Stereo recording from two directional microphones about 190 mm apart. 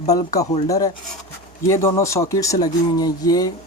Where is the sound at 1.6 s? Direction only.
15° left (ahead or behind).